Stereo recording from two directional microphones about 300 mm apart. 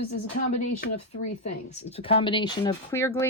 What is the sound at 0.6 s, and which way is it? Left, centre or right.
Speech, left.